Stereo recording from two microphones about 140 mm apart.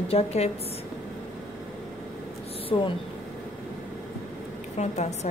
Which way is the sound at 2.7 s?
45° left (ahead or behind).